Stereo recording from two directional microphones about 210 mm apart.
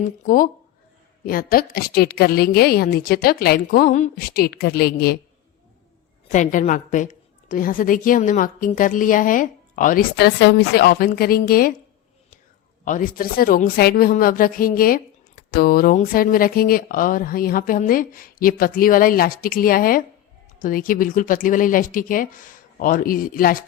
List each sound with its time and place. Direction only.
0.3 s a woman's voice: 40° left (ahead or behind)
6.3 s a woman's voice: 35° left (ahead or behind)
12.8 s a woman's voice: 40° left (ahead or behind)